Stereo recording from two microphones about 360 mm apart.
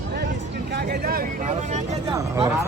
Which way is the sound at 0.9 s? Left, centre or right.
Right.